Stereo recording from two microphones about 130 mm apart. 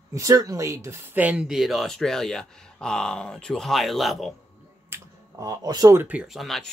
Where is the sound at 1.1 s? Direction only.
10° right (ahead or behind).